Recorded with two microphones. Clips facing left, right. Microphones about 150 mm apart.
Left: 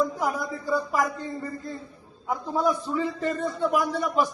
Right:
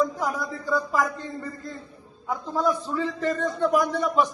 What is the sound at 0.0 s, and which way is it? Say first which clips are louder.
A man's voice: even; 10° left (ahead or behind).